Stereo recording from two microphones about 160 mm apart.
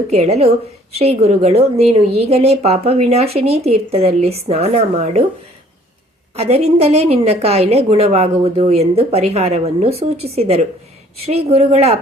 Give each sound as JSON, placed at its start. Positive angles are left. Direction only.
{"t": 0.1, "sound": "a woman's voice", "side_deg": -40}
{"t": 6.3, "sound": "a woman's voice", "side_deg": -40}